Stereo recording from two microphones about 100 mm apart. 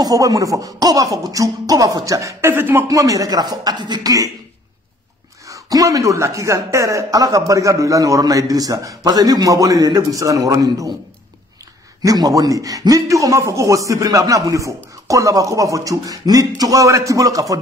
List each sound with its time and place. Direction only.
0.0 s speech: 35° right (ahead or behind)
2.9 s speech: 35° right (ahead or behind)
5.5 s speech: 35° right (ahead or behind)
12.0 s speech: 35° right (ahead or behind)